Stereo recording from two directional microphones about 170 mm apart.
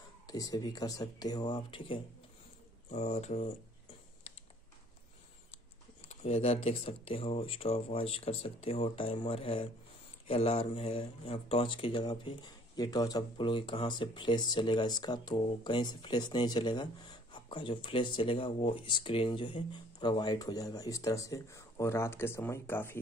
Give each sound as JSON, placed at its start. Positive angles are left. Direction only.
{"t": 0.3, "sound": "speech", "side_deg": 20}
{"t": 6.0, "sound": "speech", "side_deg": 40}